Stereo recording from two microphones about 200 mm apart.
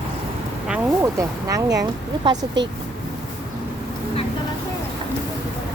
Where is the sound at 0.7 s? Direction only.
15° right (ahead or behind).